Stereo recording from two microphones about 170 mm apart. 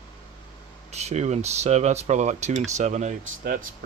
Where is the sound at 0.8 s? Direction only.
40° right (ahead or behind).